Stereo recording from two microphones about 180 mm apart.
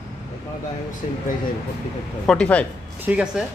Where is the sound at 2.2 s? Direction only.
5° left (ahead or behind).